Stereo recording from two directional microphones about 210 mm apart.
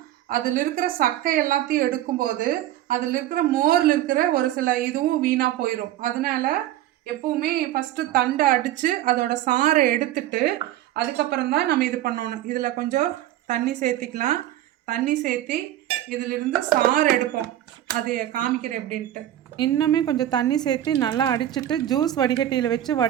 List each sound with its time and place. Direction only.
0.3 s a woman's voice: 45° right (ahead or behind)
12.5 s a woman's voice: 35° right (ahead or behind)
19.5 s speech: 20° left (ahead or behind)